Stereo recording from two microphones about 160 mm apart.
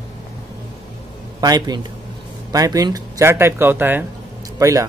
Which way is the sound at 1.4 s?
25° right (ahead or behind).